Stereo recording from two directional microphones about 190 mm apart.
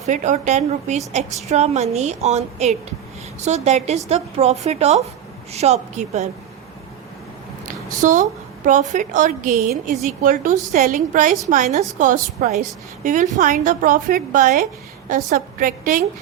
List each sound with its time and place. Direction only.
0.0 s a woman's voice: 40° right (ahead or behind)
7.6 s a woman's voice: 45° right (ahead or behind)